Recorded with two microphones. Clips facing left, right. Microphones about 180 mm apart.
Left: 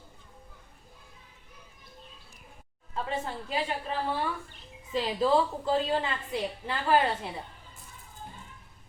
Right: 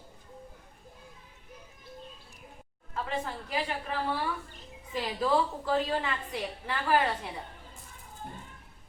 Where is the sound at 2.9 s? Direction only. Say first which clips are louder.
Left 1 dB; 25° left (ahead or behind).